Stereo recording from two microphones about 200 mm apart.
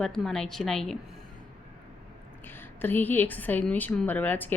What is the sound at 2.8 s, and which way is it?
A woman's voice, 10° left (ahead or behind).